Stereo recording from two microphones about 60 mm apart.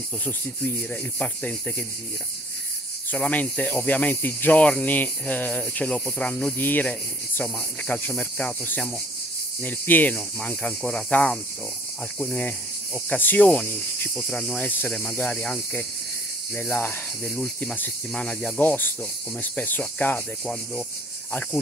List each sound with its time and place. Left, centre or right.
3.1 s speech: left
6.6 s cricket: left
7.4 s speech: centre
9.6 s cricket: left
10.4 s speech: centre
11.1 s speech: left
13.1 s cricket: left
14.2 s speech: centre
14.5 s speech: left
14.9 s speech: centre
15.1 s speech: left
18.1 s speech: centre
18.6 s cricket: left
19.4 s speech: left